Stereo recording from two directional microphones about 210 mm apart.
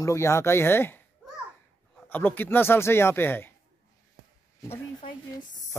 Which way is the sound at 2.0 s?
10° left (ahead or behind).